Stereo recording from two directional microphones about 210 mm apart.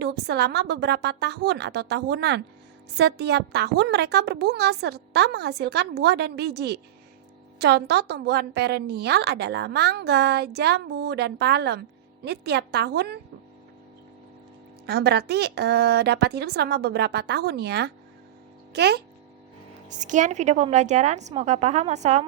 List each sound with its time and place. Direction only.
0.0 s a woman's voice: 50° right (ahead or behind)
14.8 s a woman's voice: 50° right (ahead or behind)
19.9 s a woman's voice: 35° right (ahead or behind)